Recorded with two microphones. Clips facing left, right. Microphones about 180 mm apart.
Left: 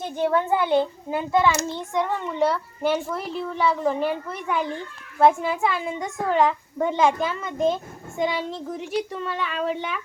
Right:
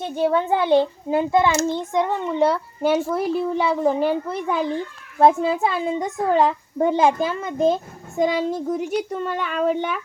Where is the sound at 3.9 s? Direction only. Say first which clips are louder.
Right 4 dB; 30° right (ahead or behind).